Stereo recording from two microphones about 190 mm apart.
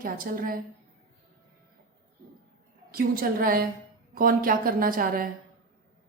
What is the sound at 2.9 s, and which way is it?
A woman's voice, 50° right (ahead or behind).